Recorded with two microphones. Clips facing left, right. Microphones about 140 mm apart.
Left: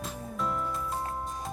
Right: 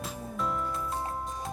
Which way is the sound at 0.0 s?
Centre (ahead or behind).